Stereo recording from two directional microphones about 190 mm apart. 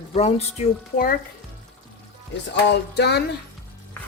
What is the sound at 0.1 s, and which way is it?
Speech, 35° left (ahead or behind).